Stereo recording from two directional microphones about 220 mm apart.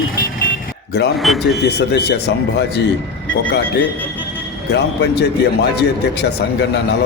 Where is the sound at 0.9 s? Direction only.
50° left (ahead or behind).